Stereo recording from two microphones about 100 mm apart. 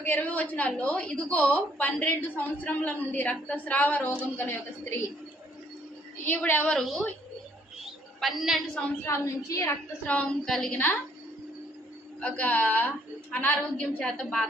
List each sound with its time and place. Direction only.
0.0 s a woman's voice: 15° left (ahead or behind)
6.2 s a woman's voice: 15° left (ahead or behind)
6.7 s a woman's voice: centre (ahead or behind)
7.9 s a sound: centre (ahead or behind)
9.0 s a woman's voice: 30° left (ahead or behind)
10.1 s a woman's voice: 10° left (ahead or behind)
12.2 s a woman's voice: 15° left (ahead or behind)